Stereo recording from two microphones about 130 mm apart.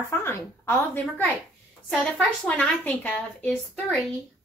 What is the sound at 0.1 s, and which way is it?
A woman's voice, 20° left (ahead or behind).